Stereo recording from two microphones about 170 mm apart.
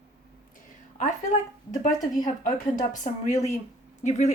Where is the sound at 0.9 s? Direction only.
45° left (ahead or behind).